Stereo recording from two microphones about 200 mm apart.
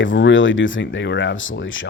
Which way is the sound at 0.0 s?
65° left (ahead or behind).